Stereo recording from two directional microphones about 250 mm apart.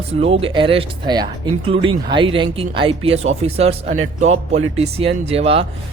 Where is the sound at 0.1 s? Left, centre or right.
Right.